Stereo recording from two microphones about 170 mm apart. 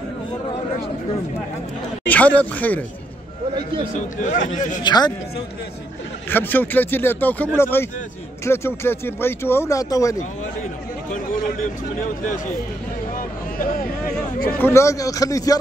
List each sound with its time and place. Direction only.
2.0 s speech: 10° left (ahead or behind)
4.2 s speech: 50° left (ahead or behind)
4.8 s a man's voice: 25° left (ahead or behind)
6.3 s speech: 10° left (ahead or behind)
13.1 s a sound: 55° left (ahead or behind)
14.6 s a man's voice: 15° left (ahead or behind)